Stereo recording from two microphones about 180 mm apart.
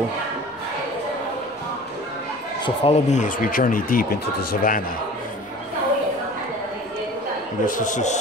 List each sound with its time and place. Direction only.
2.6 s speech: 35° left (ahead or behind); by 4.8 s 55° left (ahead or behind)
7.6 s speech: 45° left (ahead or behind)